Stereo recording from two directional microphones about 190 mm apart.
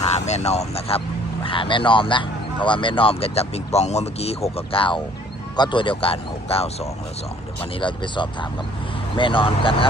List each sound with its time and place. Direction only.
0.0 s speech: 35° left (ahead or behind)